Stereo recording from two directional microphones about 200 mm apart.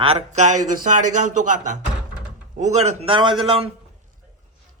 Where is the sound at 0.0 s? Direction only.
30° right (ahead or behind).